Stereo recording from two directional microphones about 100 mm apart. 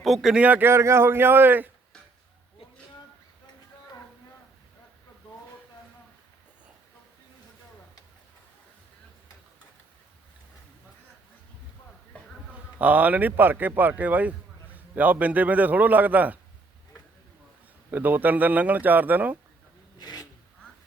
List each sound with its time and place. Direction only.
0.0 s speech: centre (ahead or behind)
0.4 s a man's voice: 20° right (ahead or behind)
12.1 s insect: 10° left (ahead or behind)
12.8 s a man's voice: 15° right (ahead or behind)
17.9 s a man's voice: 20° right (ahead or behind)
20.0 s filing: 45° left (ahead or behind)